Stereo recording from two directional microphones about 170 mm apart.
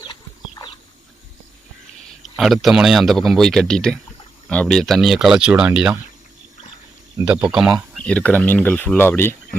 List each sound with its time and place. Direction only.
0.0 s chicken: 25° left (ahead or behind)
2.2 s speech: centre (ahead or behind)
7.3 s speech: 10° right (ahead or behind)
8.0 s speech: 5° left (ahead or behind)